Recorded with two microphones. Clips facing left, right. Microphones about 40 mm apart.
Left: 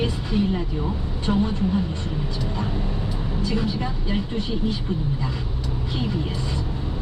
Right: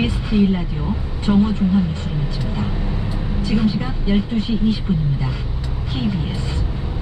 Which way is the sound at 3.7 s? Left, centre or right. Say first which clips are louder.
Right 4 dB; centre.